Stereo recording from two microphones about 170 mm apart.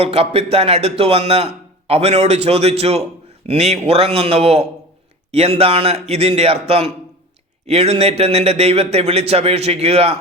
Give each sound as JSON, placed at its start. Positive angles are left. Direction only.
{"t": 0.0, "sound": "speech", "side_deg": -35}